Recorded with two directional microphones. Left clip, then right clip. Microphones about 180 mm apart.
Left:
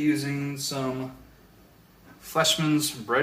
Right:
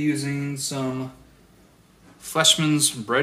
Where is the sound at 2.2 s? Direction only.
45° right (ahead or behind).